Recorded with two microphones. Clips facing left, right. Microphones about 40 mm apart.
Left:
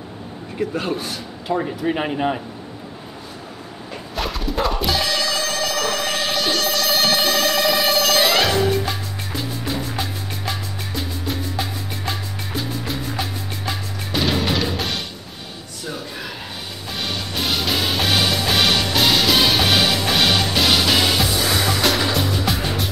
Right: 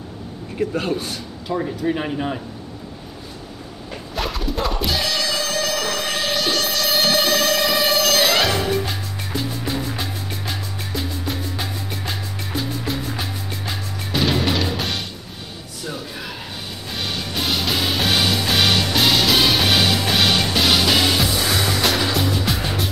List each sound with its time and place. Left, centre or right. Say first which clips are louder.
0.6 s speech: right 1 dB; centre
1.5 s speech: left 1 dB; centre
4.1 s music: even; centre